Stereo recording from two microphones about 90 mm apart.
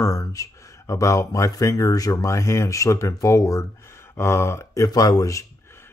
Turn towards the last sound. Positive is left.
turn(degrees=35)  # may be behind; listen again after turning